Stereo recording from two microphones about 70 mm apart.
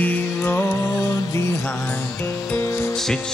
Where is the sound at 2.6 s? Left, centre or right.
Left.